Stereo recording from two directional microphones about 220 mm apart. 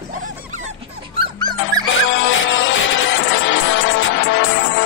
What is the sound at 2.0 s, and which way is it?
Music, 60° left (ahead or behind).